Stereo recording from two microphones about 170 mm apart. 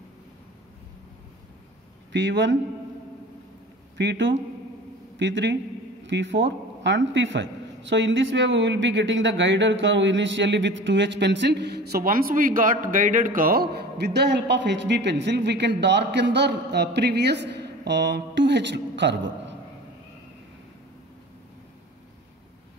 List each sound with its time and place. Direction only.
2.1 s a man's voice: 90° right
4.0 s a man's voice: 90° right